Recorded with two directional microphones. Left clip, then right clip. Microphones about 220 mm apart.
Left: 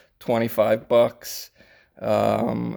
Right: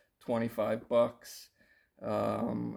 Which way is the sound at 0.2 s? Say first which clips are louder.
Left 12 dB; 45° left (ahead or behind).